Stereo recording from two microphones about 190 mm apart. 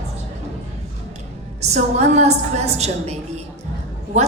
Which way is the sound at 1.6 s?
35° right (ahead or behind).